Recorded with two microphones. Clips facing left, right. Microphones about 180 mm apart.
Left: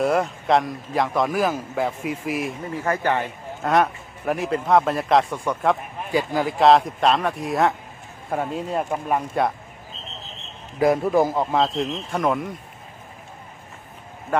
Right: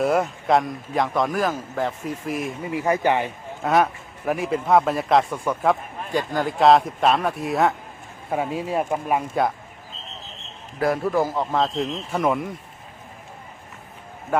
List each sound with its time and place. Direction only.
0.0 s a man's voice: centre (ahead or behind)
2.6 s a man's voice: 15° right (ahead or behind)
10.8 s a man's voice: 20° left (ahead or behind)
11.5 s a man's voice: centre (ahead or behind)